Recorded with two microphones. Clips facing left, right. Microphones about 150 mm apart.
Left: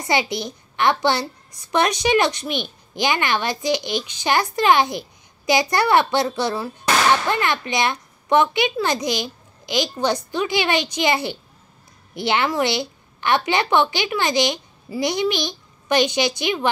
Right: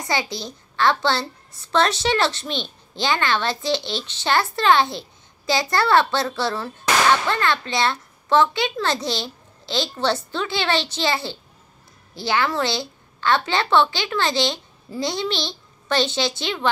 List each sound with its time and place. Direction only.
0.0 s a child's voice: 20° left (ahead or behind)